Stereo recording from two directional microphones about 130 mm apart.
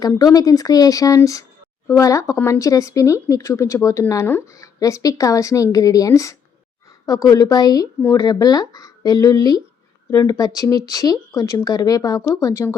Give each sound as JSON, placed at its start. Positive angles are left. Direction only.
{"t": 0.2, "sound": "speech", "side_deg": 30}